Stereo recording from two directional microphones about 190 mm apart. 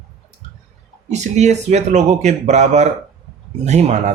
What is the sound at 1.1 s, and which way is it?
Speech, 35° right (ahead or behind).